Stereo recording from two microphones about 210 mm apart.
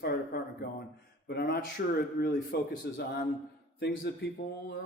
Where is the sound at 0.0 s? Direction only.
45° left (ahead or behind).